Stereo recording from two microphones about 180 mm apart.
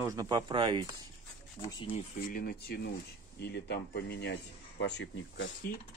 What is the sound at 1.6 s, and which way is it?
Speech, 30° left (ahead or behind).